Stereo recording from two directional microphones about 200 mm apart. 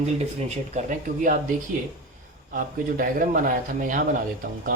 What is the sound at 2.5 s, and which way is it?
Speech, 45° right (ahead or behind).